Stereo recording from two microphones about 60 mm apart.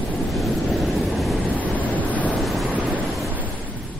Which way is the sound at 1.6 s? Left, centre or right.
Left.